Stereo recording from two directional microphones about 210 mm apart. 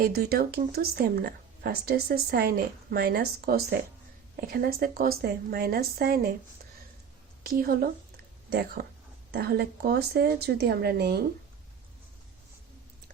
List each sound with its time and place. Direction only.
0.0 s speech: 45° right (ahead or behind)
7.4 s a woman's voice: 45° right (ahead or behind)